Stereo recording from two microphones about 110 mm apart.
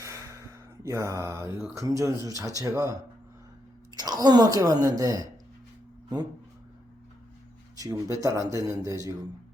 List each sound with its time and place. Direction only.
0.0 s gasp: 25° right (ahead or behind)
0.8 s speech: 30° right (ahead or behind)
7.8 s speech: 30° right (ahead or behind)